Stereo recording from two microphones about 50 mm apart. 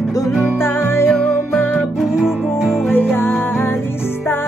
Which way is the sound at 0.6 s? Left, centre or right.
Left.